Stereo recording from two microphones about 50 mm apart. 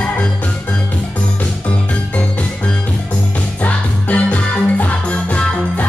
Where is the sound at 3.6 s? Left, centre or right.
Left.